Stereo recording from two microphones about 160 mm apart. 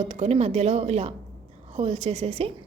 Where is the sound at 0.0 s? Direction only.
40° right (ahead or behind).